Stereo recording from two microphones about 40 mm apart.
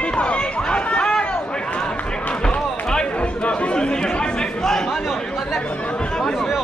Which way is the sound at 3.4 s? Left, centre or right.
Left.